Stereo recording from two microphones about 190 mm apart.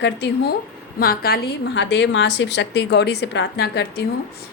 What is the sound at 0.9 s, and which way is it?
A woman's voice, 55° left (ahead or behind).